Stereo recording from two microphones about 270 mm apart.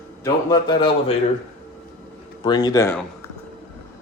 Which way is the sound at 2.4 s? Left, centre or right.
Centre.